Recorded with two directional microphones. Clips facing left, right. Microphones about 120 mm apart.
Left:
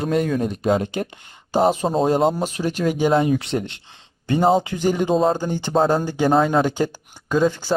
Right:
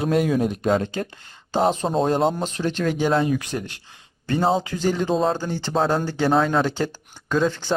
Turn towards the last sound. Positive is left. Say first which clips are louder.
# left 2 dB
turn(degrees=10)  # may be behind; listen again after turning